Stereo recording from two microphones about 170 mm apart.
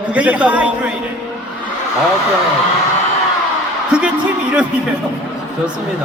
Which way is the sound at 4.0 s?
5° right (ahead or behind).